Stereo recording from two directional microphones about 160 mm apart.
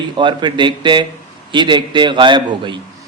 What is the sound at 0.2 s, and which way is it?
A man's voice, 30° right (ahead or behind).